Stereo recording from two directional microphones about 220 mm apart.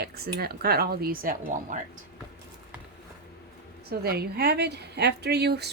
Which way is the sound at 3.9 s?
45° right (ahead or behind).